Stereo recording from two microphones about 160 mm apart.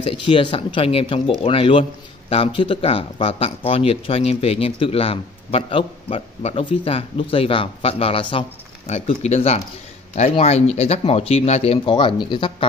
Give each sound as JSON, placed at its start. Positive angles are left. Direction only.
{"t": 0.0, "sound": "speech", "side_deg": 35}